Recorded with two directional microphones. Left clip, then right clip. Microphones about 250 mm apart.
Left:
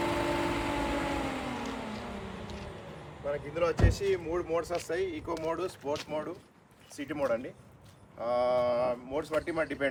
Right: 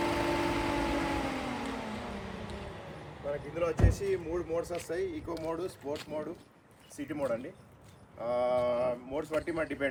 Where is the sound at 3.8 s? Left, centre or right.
Centre.